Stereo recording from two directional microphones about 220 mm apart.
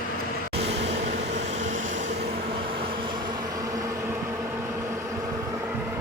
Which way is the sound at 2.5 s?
25° right (ahead or behind).